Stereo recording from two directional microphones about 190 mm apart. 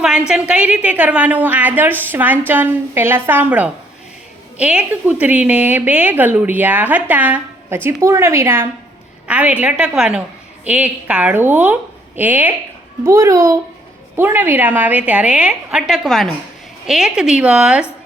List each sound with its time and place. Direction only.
0.0 s a woman's voice: 5° right (ahead or behind)